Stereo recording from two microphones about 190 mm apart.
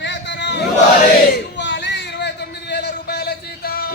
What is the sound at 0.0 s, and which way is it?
Battle cry, 65° left (ahead or behind).